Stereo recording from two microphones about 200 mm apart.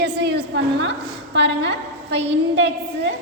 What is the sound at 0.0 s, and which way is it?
A woman's voice, 55° right (ahead or behind).